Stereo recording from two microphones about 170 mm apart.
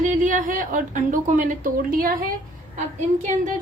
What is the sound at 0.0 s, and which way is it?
A woman's voice, 50° right (ahead or behind).